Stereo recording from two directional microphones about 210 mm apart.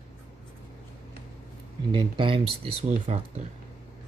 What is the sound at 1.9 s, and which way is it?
Speech, 20° right (ahead or behind).